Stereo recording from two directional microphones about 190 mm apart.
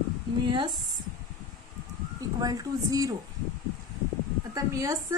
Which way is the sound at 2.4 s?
20° right (ahead or behind).